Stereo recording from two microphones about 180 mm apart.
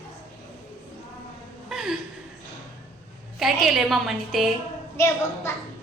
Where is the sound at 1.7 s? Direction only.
5° right (ahead or behind).